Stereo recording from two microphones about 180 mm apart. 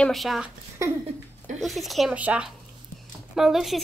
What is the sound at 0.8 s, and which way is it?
Speech, 15° right (ahead or behind).